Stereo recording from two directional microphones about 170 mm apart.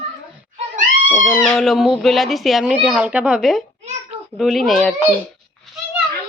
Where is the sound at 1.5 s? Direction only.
Centre (ahead or behind).